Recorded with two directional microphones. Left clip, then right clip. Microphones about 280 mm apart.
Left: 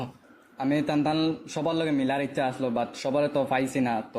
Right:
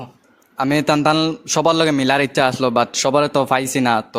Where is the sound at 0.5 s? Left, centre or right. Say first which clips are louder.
Right 10 dB; right.